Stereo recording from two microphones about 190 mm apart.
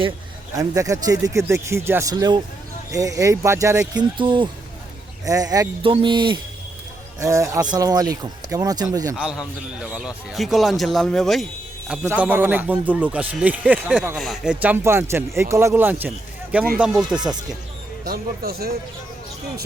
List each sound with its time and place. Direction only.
0.8 s speech: 15° right (ahead or behind)
9.1 s a man's voice: 5° right (ahead or behind)
18.0 s speech: 55° right (ahead or behind)